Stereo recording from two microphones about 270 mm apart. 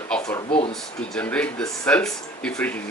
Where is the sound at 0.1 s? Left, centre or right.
Centre.